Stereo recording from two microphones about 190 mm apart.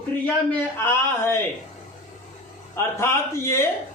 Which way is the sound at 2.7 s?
15° left (ahead or behind).